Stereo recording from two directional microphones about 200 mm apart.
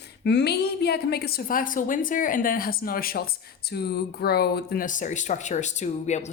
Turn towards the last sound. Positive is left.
turn(degrees=35)  # may be behind; listen again after turning